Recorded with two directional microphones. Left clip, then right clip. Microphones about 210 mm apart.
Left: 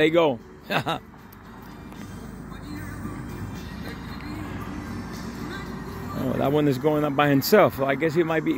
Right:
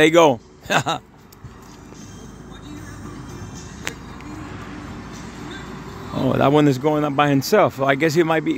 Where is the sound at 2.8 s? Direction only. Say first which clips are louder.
Even; 40° left (ahead or behind).